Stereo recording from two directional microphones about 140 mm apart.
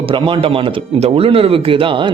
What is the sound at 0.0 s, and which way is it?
Speech, 40° right (ahead or behind).